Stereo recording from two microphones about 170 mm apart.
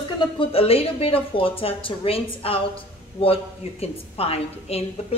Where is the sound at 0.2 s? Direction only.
30° left (ahead or behind).